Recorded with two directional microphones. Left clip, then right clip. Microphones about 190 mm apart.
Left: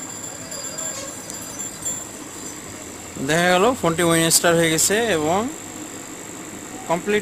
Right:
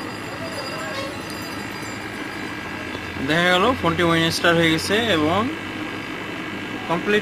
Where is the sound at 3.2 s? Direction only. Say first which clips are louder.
Left 1 dB; 60° left (ahead or behind).